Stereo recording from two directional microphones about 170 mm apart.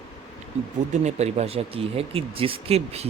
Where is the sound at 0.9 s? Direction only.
40° right (ahead or behind).